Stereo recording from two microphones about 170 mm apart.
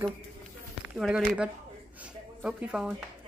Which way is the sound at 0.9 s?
5° right (ahead or behind).